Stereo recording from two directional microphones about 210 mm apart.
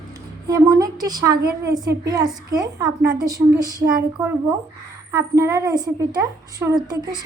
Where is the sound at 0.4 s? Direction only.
15° right (ahead or behind).